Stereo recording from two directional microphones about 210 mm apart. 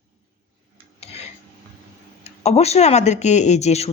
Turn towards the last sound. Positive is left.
turn(degrees=30)  # may be behind; listen again after turning